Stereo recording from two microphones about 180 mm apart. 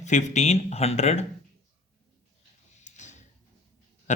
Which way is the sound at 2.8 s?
40° left (ahead or behind).